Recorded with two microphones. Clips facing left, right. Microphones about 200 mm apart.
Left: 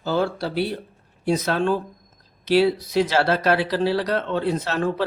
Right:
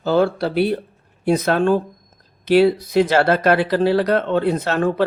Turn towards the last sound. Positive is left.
turn(degrees=-55)  # may be behind; listen again after turning